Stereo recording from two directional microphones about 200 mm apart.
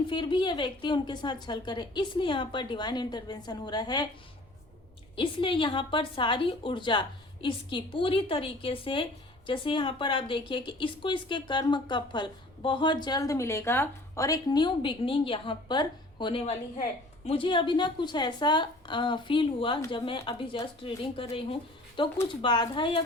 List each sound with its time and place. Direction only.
0.1 s speech: 25° left (ahead or behind)
5.1 s speech: 25° left (ahead or behind)